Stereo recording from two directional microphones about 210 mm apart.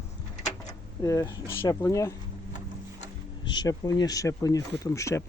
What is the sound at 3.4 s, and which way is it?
Speech, 20° left (ahead or behind).